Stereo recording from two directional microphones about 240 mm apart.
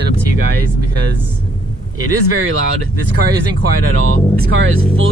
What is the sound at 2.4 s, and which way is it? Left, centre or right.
Speech, right.